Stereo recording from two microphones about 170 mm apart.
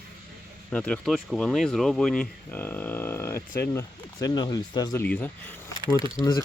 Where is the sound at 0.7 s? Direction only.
5° left (ahead or behind); by 5.0 s 20° left (ahead or behind).